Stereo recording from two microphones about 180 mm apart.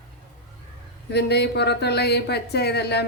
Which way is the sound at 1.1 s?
70° left (ahead or behind).